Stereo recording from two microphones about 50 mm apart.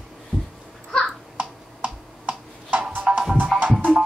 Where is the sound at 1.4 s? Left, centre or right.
Right.